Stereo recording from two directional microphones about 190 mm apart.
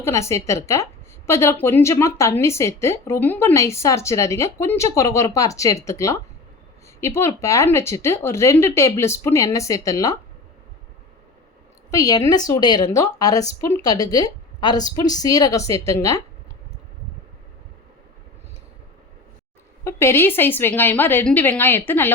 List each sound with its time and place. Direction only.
0.0 s a woman's voice: 15° left (ahead or behind)
11.9 s a woman's voice: 20° left (ahead or behind)
19.8 s a woman's voice: 15° left (ahead or behind)